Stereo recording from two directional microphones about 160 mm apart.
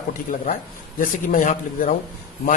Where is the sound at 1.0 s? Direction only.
55° left (ahead or behind).